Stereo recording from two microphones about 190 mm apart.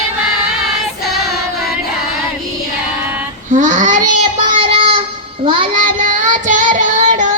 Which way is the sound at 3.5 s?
40° right (ahead or behind).